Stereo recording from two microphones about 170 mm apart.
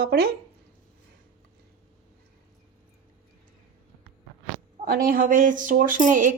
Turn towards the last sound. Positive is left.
turn(degrees=-50)  # may be behind; listen again after turning